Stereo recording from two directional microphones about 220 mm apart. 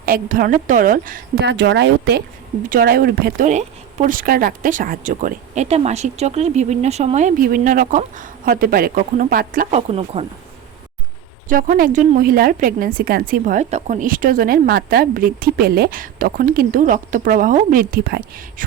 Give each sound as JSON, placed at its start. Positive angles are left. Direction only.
{"t": 0.0, "sound": "speech", "side_deg": -40}
{"t": 1.4, "sound": "speech", "side_deg": -50}
{"t": 11.4, "sound": "speech", "side_deg": -40}